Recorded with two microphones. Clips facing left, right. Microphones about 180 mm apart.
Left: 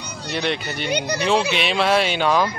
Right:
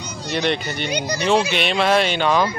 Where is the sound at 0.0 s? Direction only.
60° left (ahead or behind).